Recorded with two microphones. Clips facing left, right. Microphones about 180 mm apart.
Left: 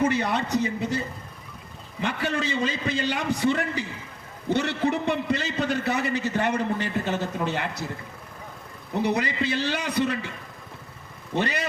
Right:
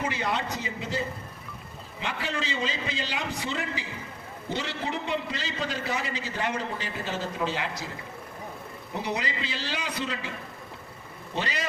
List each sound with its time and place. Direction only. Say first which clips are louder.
0.0 s a man's voice: left 6 dB; 60° left (ahead or behind)
2.0 s a man's voice: left 5 dB; 55° left (ahead or behind)
9.0 s a man's voice: left 7 dB; 60° left (ahead or behind)
11.3 s a man's voice: left 5 dB; 60° left (ahead or behind)